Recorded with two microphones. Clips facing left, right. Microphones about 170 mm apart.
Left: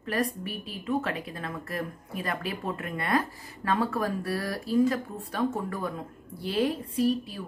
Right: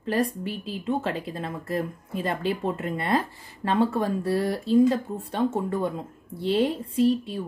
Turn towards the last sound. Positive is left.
turn(degrees=-25)  # may be behind; listen again after turning